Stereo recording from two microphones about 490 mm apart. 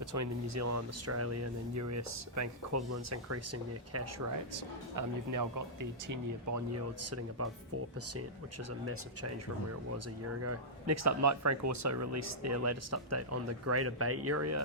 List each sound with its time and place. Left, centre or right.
0.0 s speech: right
10.4 s speech: right